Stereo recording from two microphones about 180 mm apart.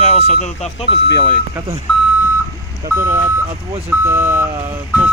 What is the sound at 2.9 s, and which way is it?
Speech, 15° right (ahead or behind).